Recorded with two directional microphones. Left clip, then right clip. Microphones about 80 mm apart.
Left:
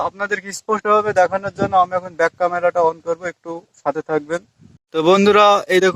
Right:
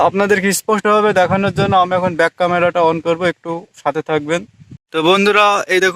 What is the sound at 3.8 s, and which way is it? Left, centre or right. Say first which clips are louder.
A man's voice: right 2 dB; centre.